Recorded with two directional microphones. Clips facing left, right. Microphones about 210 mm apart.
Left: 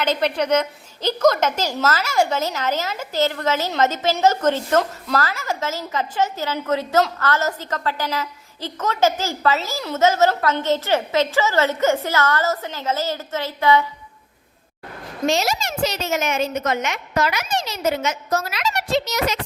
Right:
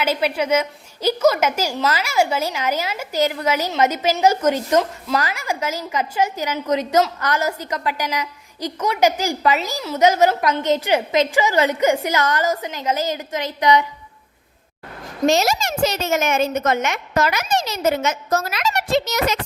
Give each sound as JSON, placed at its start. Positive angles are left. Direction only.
{"t": 0.0, "sound": "a woman's voice", "side_deg": -5}
{"t": 15.3, "sound": "a woman's voice", "side_deg": -45}